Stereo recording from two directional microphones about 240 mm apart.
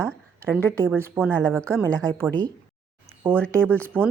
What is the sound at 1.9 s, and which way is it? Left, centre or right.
Speech, centre.